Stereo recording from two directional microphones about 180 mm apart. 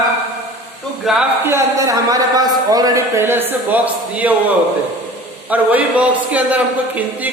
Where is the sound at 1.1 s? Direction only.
Centre (ahead or behind).